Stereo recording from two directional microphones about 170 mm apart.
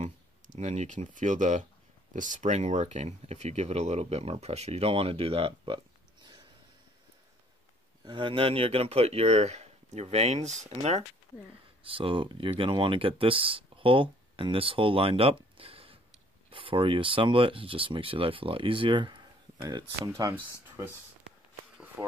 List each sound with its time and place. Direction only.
0.0 s speech: 45° right (ahead or behind)
8.0 s speech: 30° right (ahead or behind)